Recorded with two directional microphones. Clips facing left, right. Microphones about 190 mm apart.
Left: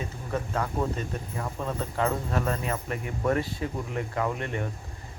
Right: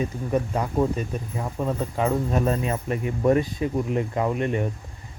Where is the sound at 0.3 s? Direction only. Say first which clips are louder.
Right 3 dB; 15° right (ahead or behind).